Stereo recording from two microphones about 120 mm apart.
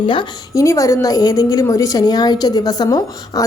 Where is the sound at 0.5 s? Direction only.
25° left (ahead or behind).